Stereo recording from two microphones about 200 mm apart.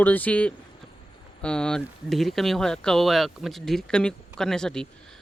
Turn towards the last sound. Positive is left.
turn(degrees=5)  # may be behind; listen again after turning